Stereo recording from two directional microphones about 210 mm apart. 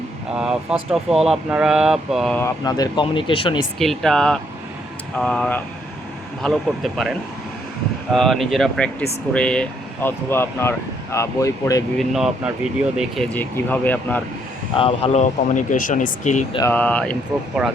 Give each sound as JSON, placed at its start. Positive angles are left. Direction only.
{"t": 0.3, "sound": "speech", "side_deg": -5}
{"t": 2.4, "sound": "speech", "side_deg": 20}
{"t": 3.8, "sound": "speech", "side_deg": 0}
{"t": 11.9, "sound": "speech", "side_deg": 0}
{"t": 14.8, "sound": "speech", "side_deg": 25}
{"t": 16.6, "sound": "speech", "side_deg": 10}